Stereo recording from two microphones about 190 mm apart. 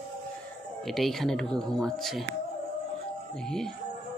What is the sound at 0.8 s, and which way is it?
Speech, centre (ahead or behind).